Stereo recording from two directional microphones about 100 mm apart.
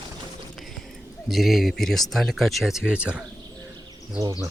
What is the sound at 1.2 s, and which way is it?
Speech, centre (ahead or behind).